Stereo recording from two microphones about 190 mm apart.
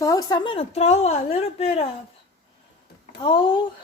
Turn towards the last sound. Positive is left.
turn(degrees=25)  # may be behind; listen again after turning